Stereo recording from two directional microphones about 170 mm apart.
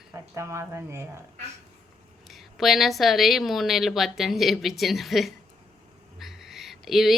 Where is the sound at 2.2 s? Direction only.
Centre (ahead or behind).